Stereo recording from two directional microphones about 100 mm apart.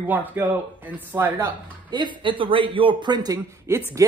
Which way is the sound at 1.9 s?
50° right (ahead or behind).